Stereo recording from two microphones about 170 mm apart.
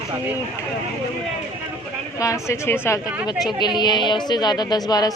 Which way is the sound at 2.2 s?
20° left (ahead or behind).